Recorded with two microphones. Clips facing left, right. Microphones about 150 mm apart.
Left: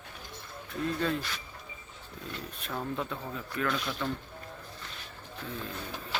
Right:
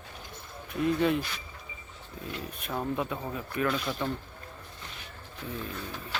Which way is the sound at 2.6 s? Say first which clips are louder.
Right 3 dB; 15° right (ahead or behind).